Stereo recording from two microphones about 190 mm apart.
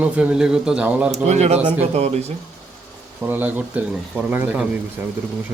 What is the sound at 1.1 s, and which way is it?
Speech, 35° right (ahead or behind).